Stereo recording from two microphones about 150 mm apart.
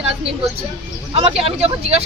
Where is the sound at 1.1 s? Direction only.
40° right (ahead or behind).